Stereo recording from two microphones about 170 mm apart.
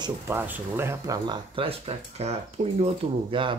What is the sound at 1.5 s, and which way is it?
Speech, 35° right (ahead or behind).